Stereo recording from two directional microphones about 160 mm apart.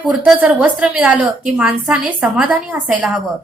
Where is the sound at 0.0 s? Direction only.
10° right (ahead or behind).